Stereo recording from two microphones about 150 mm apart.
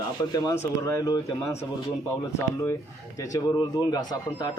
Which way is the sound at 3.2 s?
25° left (ahead or behind).